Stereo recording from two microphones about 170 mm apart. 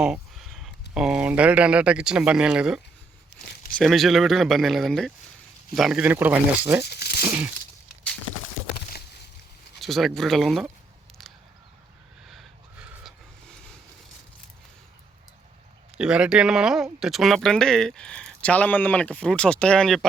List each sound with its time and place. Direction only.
0.0 s speech: 5° right (ahead or behind)
6.8 s tearing: 70° left (ahead or behind)
7.3 s a sound: 10° right (ahead or behind)
9.8 s speech: centre (ahead or behind)
12.3 s a sound: 5° right (ahead or behind)
16.0 s speech: 5° right (ahead or behind)